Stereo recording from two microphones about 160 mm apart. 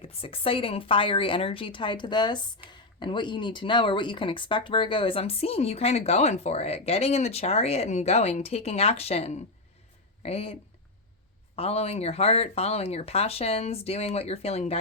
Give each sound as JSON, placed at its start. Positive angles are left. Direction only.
{"t": 0.0, "sound": "speech", "side_deg": 35}